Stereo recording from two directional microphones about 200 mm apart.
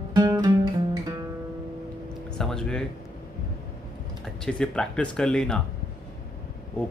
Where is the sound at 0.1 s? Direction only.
20° right (ahead or behind).